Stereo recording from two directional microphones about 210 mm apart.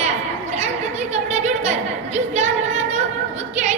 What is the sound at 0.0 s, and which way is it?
Chatter, 30° right (ahead or behind).